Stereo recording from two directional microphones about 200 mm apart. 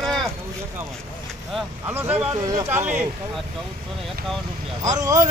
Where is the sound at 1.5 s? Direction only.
10° right (ahead or behind).